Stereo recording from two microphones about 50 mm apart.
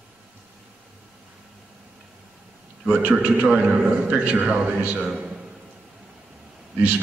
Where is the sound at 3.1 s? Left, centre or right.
Right.